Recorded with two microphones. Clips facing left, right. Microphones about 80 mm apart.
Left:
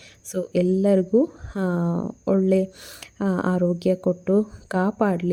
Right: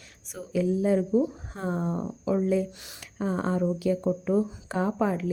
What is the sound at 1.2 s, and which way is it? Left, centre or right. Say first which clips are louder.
Speech: left 6 dB; left.